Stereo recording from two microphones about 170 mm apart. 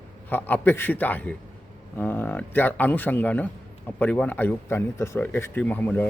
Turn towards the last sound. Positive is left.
turn(degrees=10)  # may be behind; listen again after turning